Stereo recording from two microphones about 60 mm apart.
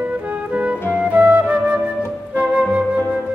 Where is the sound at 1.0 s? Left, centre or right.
Right.